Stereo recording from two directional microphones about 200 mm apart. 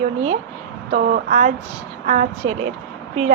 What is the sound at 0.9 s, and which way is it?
Speech, 50° right (ahead or behind).